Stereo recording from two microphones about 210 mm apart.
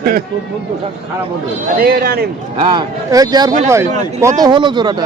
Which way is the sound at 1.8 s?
45° right (ahead or behind).